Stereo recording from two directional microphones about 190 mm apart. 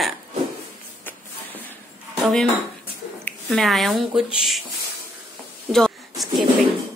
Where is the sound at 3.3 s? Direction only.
Centre (ahead or behind).